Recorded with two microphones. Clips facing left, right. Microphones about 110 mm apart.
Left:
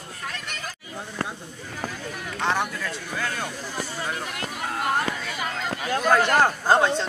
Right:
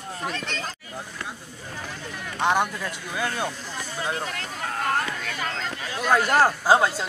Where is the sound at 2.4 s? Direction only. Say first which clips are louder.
Right 3 dB; 15° right (ahead or behind).